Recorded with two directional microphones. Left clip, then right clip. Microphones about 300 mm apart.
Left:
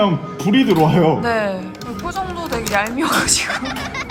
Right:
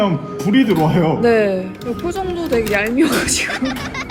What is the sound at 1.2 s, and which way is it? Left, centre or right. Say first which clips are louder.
Speech: right 5 dB; centre.